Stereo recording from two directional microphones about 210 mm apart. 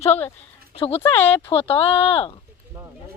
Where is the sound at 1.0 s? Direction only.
10° left (ahead or behind).